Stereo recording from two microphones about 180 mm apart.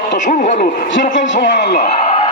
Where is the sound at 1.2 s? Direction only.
80° left.